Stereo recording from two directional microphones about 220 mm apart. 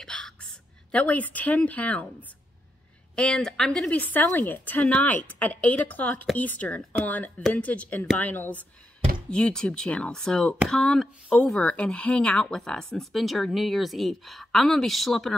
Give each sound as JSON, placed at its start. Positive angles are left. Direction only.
{"t": 0.0, "sound": "a woman's voice", "side_deg": 5}
{"t": 3.2, "sound": "speech", "side_deg": 5}